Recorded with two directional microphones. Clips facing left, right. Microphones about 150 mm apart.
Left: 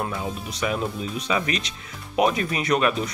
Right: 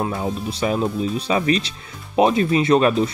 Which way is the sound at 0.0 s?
30° right (ahead or behind).